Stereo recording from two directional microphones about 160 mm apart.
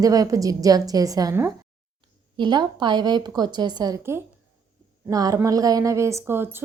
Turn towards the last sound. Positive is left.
turn(degrees=-15)  # may be behind; listen again after turning